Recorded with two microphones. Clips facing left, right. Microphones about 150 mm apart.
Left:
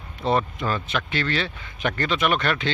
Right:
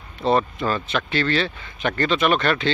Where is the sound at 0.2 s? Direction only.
15° left (ahead or behind).